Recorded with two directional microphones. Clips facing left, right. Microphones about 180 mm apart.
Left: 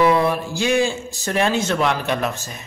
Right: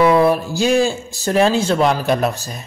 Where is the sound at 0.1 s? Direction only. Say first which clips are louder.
Right 5 dB; 35° right (ahead or behind).